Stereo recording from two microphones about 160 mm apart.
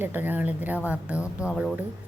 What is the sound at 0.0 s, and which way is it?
A woman's voice, 10° right (ahead or behind).